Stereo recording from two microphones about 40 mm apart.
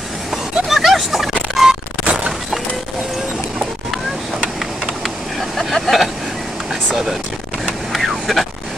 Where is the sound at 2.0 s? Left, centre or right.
Right.